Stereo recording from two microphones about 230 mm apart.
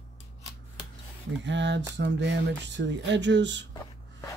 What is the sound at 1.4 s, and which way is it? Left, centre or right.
Speech, right.